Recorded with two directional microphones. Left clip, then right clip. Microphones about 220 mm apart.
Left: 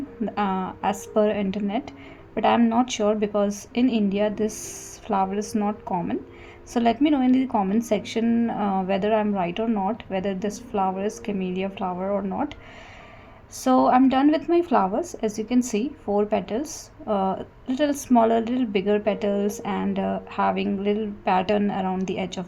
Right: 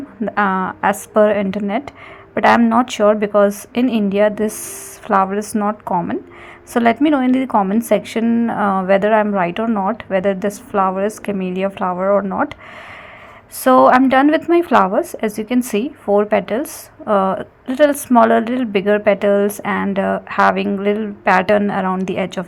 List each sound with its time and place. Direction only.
0.3 s a woman's voice: 20° right (ahead or behind)
13.7 s a woman's voice: 20° right (ahead or behind)